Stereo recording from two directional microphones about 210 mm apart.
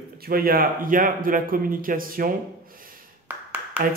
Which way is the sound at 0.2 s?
45° right (ahead or behind).